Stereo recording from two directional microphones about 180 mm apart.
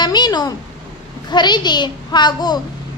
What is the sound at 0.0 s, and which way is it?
A woman's voice, 25° left (ahead or behind).